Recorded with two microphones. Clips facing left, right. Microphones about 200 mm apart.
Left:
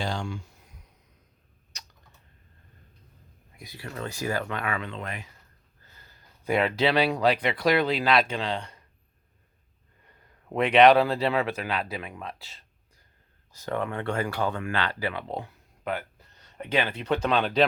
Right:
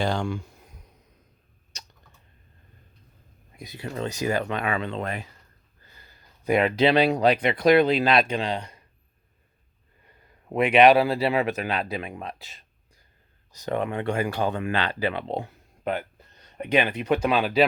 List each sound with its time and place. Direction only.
0.0 s speech: 60° right (ahead or behind)
3.5 s speech: 20° right (ahead or behind)
6.4 s speech: 15° right (ahead or behind)
10.1 s speech: 10° right (ahead or behind)